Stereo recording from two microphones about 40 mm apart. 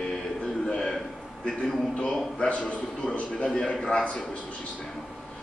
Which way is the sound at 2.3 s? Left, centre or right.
Left.